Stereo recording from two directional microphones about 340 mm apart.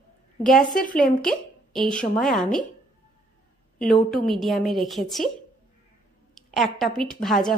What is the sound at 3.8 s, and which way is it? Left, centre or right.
A woman's voice, centre.